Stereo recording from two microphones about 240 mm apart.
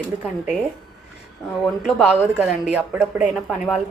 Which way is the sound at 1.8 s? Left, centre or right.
Centre.